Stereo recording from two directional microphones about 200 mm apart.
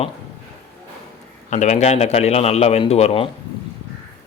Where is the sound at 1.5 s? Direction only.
35° left (ahead or behind).